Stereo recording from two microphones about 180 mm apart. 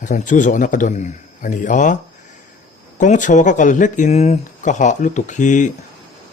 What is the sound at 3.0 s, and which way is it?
Speech, 45° left (ahead or behind).